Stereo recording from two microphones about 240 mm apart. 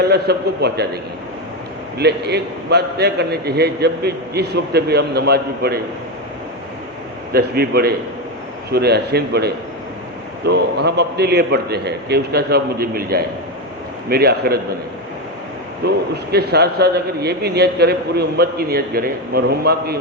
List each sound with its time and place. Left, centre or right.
0.1 s a man's voice: right
2.0 s a man's voice: right
7.3 s a man's voice: right
16.3 s a man's voice: right